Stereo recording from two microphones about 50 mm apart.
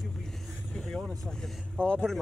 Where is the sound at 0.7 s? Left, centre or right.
Centre.